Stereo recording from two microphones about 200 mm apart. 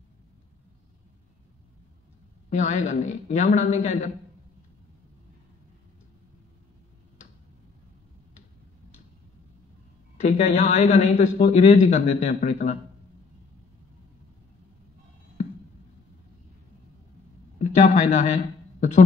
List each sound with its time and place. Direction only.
2.5 s speech: 35° left (ahead or behind)
10.2 s speech: 35° left (ahead or behind)
17.6 s a man's voice: 35° left (ahead or behind)